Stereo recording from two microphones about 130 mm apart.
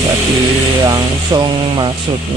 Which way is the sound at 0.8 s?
30° right (ahead or behind).